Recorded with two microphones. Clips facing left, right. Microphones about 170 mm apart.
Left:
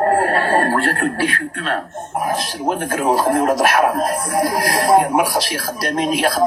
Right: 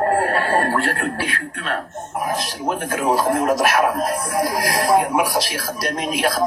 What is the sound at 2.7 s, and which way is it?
Speech, 30° left (ahead or behind).